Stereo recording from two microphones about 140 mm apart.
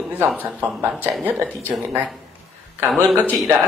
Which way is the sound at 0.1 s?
10° right (ahead or behind).